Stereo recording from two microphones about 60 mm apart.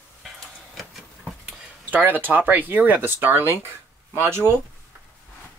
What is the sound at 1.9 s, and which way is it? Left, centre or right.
Speech, right.